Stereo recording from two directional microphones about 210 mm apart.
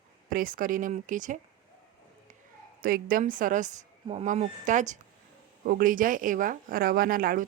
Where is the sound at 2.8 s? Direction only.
45° right (ahead or behind).